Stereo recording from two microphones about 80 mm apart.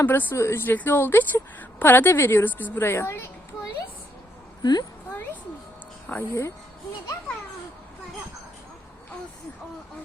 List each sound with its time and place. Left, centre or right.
0.0 s a woman's voice: left
0.3 s a woman's voice: left
4.6 s speech: left
6.1 s a woman's voice: left